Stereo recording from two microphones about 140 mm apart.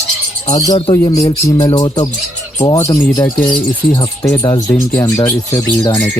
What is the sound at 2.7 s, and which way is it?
Speech, 20° left (ahead or behind).